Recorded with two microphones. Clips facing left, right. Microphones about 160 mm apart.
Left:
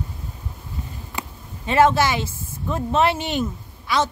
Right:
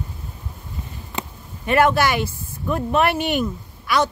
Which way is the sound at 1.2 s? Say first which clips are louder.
Right 3 dB; 20° right (ahead or behind).